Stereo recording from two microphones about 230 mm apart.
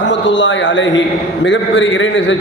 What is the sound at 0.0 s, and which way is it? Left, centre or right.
A man's voice, left.